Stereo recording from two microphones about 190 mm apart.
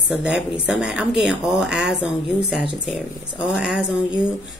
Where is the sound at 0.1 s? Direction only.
5° right (ahead or behind).